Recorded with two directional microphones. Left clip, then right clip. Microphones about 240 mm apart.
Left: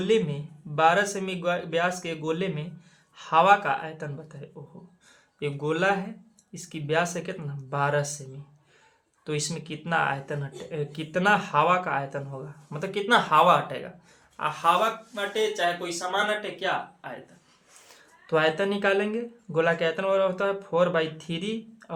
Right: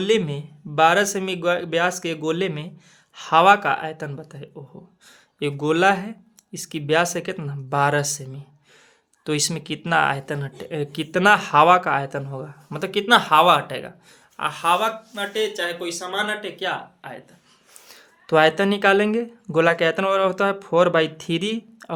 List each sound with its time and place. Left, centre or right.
0.0 s speech: right
9.2 s speech: right